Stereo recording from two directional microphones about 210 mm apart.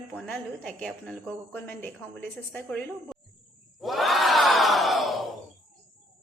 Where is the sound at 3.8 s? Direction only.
Centre (ahead or behind).